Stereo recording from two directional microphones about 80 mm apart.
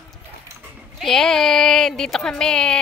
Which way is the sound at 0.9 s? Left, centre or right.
Centre.